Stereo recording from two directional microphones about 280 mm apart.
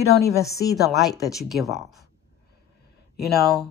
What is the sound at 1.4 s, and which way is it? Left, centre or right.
Speech, centre.